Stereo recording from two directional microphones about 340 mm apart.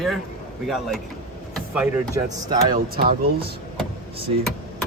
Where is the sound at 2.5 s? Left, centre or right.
Right.